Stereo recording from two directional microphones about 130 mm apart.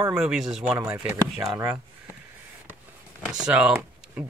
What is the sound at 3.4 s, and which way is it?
Speech, 5° right (ahead or behind).